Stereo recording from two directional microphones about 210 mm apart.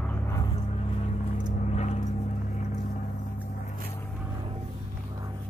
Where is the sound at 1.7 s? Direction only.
30° left (ahead or behind).